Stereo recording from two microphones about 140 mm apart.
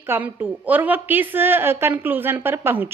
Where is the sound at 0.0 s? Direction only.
15° right (ahead or behind).